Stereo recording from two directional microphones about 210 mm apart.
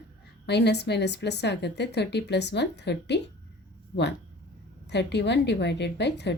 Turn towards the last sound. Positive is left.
turn(degrees=55)  # may be behind; listen again after turning